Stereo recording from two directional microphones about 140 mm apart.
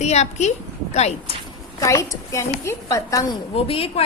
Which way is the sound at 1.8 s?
20° left (ahead or behind).